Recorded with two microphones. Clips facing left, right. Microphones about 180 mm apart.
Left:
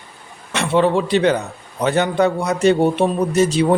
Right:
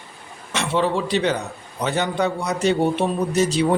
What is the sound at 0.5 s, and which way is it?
A man's voice, 55° left (ahead or behind).